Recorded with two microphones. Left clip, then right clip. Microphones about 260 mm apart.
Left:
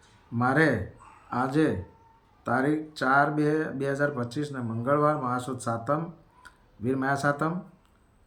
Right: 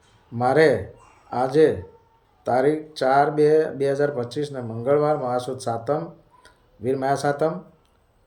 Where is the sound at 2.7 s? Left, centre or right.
Left.